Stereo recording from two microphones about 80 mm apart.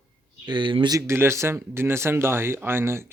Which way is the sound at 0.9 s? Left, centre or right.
Right.